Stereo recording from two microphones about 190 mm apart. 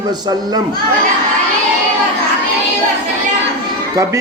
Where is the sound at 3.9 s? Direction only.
15° right (ahead or behind).